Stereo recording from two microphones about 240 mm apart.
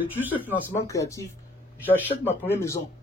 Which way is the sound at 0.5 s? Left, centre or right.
Centre.